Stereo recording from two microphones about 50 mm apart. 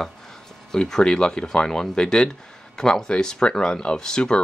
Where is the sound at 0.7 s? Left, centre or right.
Centre.